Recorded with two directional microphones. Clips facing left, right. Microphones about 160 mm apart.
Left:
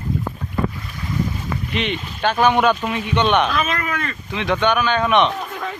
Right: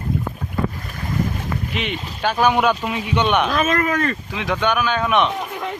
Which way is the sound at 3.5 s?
45° right (ahead or behind).